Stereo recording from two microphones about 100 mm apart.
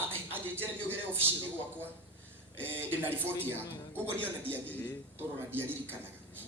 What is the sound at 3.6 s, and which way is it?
Speech, 40° left (ahead or behind).